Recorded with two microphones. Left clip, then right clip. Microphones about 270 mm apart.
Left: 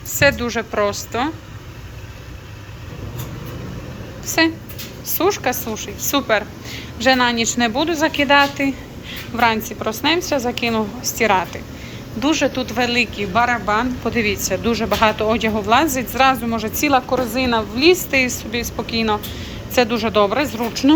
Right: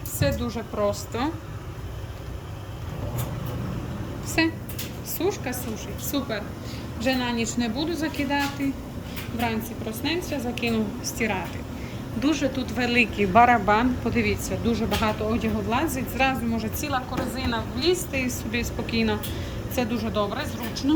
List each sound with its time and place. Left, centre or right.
0.2 s speech: centre
5.0 s speech: centre
16.8 s a woman's voice: left
17.9 s speech: centre
20.1 s speech: centre